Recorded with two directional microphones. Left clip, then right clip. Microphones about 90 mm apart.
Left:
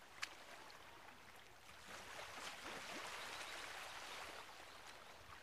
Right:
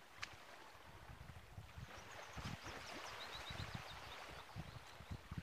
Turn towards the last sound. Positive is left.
turn(degrees=45)  # may be behind; listen again after turning